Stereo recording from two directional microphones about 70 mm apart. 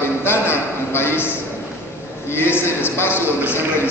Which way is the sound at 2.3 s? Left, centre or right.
Left.